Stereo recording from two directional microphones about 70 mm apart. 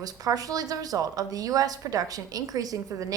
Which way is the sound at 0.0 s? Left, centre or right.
Right.